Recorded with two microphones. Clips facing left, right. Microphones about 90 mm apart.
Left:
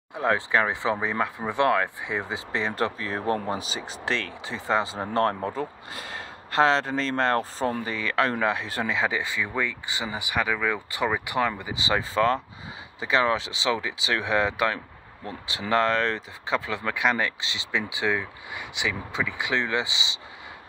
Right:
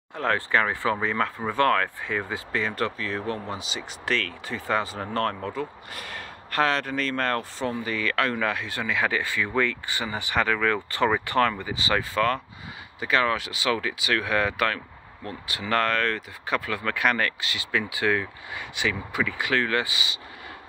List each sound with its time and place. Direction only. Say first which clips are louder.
0.1 s speech: left 1 dB; 15° left (ahead or behind); by 8.9 s 35° left (ahead or behind)
8.9 s speech: right 3 dB; 20° left (ahead or behind)